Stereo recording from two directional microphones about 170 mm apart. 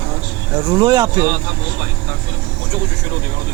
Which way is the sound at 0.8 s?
25° right (ahead or behind).